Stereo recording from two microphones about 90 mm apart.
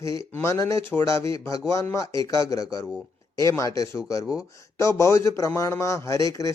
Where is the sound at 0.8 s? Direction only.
20° left (ahead or behind).